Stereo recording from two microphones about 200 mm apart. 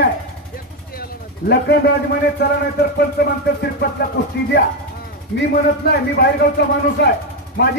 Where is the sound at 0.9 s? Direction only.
50° left (ahead or behind).